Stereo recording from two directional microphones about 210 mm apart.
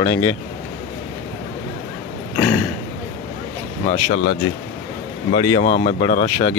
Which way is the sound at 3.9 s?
50° left (ahead or behind).